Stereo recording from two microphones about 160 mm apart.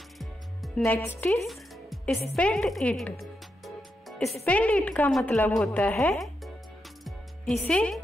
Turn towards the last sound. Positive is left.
turn(degrees=5)  # may be behind; listen again after turning